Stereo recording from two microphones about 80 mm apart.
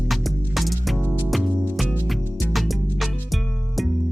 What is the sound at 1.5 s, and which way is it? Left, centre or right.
Music, left.